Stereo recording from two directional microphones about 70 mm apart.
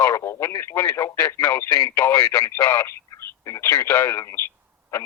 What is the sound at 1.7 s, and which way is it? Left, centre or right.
Speech, left.